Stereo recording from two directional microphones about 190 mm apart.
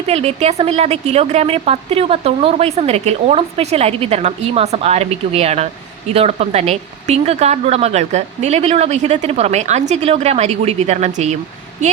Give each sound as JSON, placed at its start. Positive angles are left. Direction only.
{"t": 0.1, "sound": "a woman's voice", "side_deg": -35}